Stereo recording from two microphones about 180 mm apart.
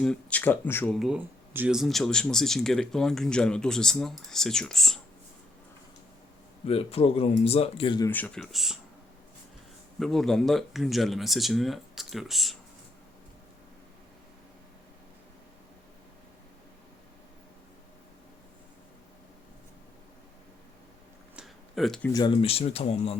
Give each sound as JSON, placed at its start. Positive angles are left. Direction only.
{"t": 0.0, "sound": "speech", "side_deg": 5}
{"t": 0.9, "sound": "speech", "side_deg": -5}
{"t": 6.7, "sound": "speech", "side_deg": 35}
{"t": 8.0, "sound": "speech", "side_deg": 10}
{"t": 10.0, "sound": "speech", "side_deg": 0}
{"t": 21.3, "sound": "a sound", "side_deg": 0}
{"t": 22.1, "sound": "speech", "side_deg": 25}